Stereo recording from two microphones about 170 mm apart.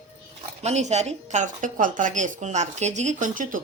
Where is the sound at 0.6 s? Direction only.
40° right (ahead or behind).